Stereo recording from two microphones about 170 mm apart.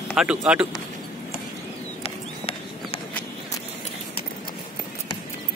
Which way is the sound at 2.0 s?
35° left (ahead or behind).